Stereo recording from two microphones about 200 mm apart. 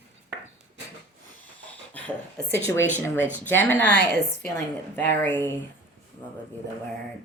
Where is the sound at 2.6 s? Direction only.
65° right (ahead or behind).